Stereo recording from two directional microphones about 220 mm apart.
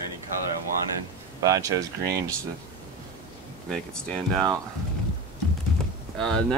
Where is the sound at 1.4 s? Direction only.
15° right (ahead or behind).